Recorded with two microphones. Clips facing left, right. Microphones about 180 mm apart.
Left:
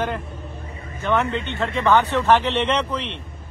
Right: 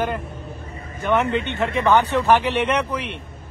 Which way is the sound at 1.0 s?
20° right (ahead or behind).